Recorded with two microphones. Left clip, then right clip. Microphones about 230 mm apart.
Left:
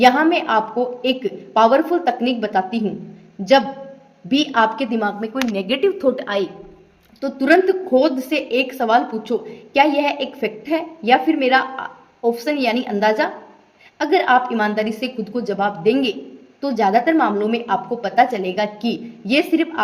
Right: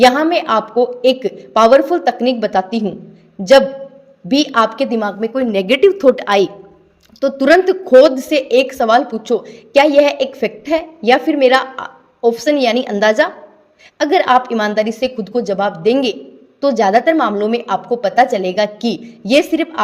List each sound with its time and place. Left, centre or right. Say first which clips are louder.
0.0 s a woman's voice: right 3 dB; right
4.3 s a woman's voice: right 3 dB; right